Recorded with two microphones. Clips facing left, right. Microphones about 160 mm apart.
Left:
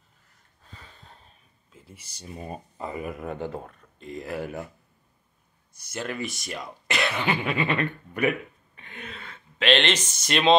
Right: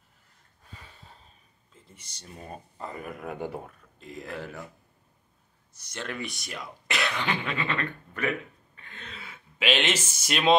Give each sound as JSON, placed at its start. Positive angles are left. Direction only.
{"t": 0.7, "sound": "a sound", "side_deg": -10}
{"t": 1.7, "sound": "speech", "side_deg": 10}
{"t": 3.3, "sound": "speech", "side_deg": -15}
{"t": 4.0, "sound": "speech", "side_deg": 0}
{"t": 4.4, "sound": "speech", "side_deg": 15}
{"t": 5.8, "sound": "speech", "side_deg": 10}
{"t": 9.2, "sound": "speech", "side_deg": -10}